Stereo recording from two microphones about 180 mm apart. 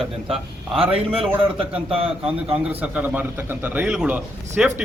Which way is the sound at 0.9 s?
30° right (ahead or behind).